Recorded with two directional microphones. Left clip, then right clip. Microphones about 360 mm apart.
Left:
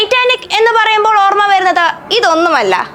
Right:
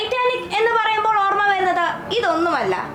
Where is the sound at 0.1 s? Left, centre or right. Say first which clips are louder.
Left 9 dB; centre.